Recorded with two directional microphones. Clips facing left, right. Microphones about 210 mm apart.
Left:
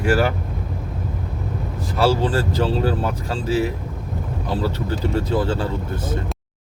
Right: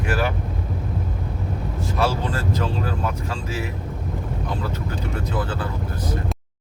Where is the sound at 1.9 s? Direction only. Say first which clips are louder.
Left 6 dB; 30° left (ahead or behind).